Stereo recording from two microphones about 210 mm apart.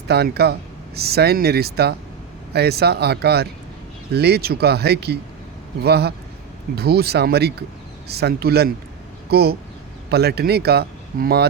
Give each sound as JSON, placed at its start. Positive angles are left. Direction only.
{"t": 0.1, "sound": "speech", "side_deg": -50}